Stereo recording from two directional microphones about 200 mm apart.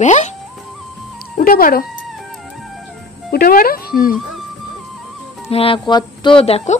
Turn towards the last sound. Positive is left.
turn(degrees=30)  # may be behind; listen again after turning